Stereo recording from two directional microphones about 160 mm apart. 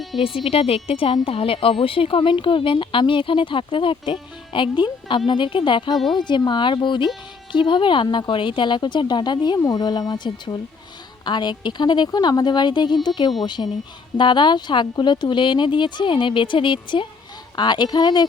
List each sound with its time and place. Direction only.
0.2 s speech: 35° left (ahead or behind)